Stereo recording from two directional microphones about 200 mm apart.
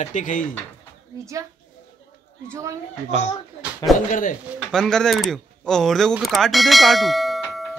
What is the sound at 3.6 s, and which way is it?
Speech, centre (ahead or behind).